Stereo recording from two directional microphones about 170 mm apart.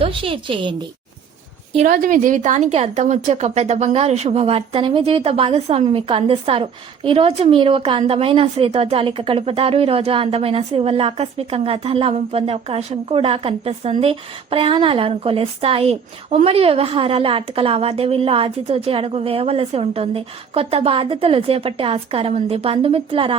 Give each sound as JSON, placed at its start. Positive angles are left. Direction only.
{"t": 0.0, "sound": "a woman's voice", "side_deg": -30}
{"t": 1.9, "sound": "a woman's voice", "side_deg": -55}